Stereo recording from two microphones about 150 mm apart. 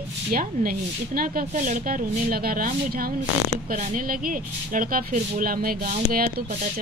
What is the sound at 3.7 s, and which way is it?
Speech, 55° right (ahead or behind).